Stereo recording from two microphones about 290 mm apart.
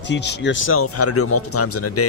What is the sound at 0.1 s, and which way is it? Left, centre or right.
Speech, left.